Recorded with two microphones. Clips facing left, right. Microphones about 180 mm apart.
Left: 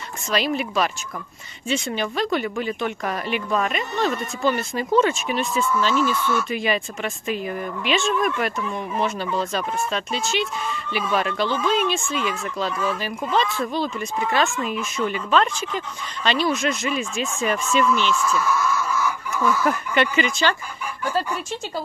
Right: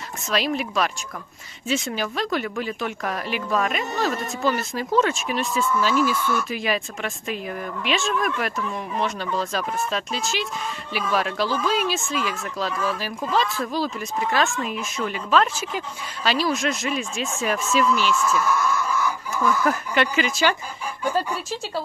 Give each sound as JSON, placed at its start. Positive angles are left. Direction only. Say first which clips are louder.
{"t": 0.3, "sound": "speech", "louder": "left 1 dB", "side_deg": 0}
{"t": 18.9, "sound": "speech", "louder": "left 1 dB", "side_deg": 5}
{"t": 21.0, "sound": "speech", "louder": "even", "side_deg": -15}